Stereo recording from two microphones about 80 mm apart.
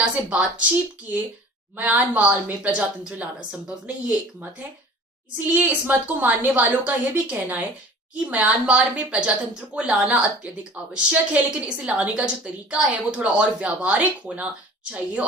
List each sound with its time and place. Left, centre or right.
0.0 s a woman's voice: centre
1.7 s a woman's voice: centre